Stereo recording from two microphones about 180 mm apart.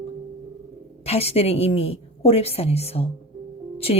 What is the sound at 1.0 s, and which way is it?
A woman's voice, 35° left (ahead or behind).